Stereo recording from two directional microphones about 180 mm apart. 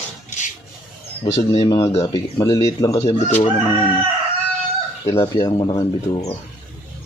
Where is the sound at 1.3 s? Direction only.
30° left (ahead or behind).